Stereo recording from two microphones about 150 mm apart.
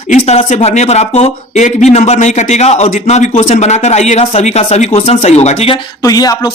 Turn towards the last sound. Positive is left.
turn(degrees=25)  # may be behind; listen again after turning